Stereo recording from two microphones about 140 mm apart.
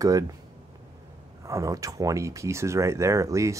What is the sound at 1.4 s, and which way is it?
Speech, 25° right (ahead or behind).